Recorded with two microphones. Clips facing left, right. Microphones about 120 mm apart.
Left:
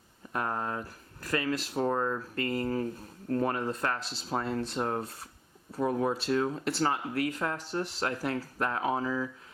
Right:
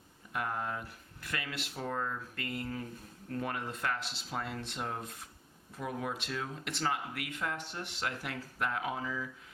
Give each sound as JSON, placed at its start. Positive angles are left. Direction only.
{"t": 0.3, "sound": "speech", "side_deg": 40}